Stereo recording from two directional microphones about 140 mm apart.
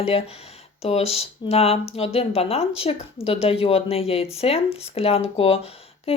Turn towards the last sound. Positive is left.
turn(degrees=45)  # may be behind; listen again after turning